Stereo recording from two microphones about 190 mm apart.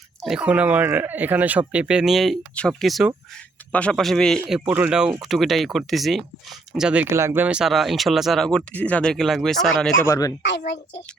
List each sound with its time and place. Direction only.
0.2 s speech: 5° right (ahead or behind)
10.1 s speech: 20° left (ahead or behind)